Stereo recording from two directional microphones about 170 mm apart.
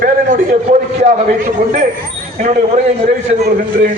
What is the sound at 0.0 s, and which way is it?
A man's voice, 50° right (ahead or behind).